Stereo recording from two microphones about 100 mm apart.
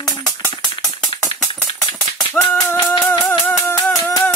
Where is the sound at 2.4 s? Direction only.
15° left (ahead or behind).